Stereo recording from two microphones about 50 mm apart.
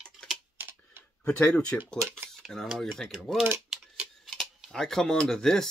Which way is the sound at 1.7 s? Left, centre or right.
Left.